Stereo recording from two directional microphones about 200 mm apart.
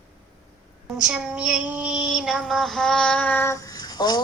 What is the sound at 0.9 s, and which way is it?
Child singing, 5° right (ahead or behind).